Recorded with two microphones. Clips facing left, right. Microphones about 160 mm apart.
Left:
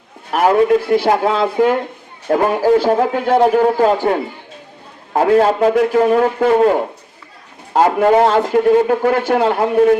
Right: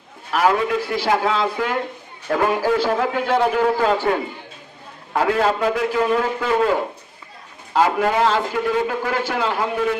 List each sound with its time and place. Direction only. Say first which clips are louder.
0.3 s a man's voice: left 6 dB; 45° left (ahead or behind)
0.8 s a man's voice: left 6 dB; 55° left (ahead or behind)
2.2 s a man's voice: left 5 dB; 35° left (ahead or behind)
5.7 s a man's voice: left 7 dB; 50° left (ahead or behind)